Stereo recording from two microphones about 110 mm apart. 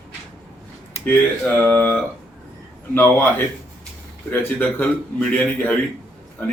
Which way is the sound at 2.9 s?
25° left (ahead or behind).